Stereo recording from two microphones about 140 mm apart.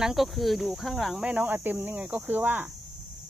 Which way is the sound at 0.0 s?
Centre (ahead or behind).